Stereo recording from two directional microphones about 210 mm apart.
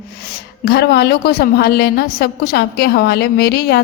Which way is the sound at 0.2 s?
50° left (ahead or behind).